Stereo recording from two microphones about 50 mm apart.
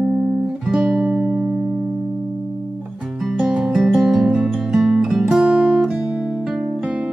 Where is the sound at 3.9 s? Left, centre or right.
Centre.